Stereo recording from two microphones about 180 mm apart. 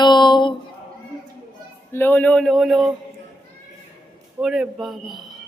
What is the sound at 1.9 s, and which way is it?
A man's voice, 10° left (ahead or behind).